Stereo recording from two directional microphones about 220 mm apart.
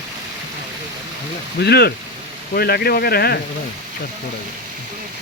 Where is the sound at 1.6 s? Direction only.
45° left (ahead or behind).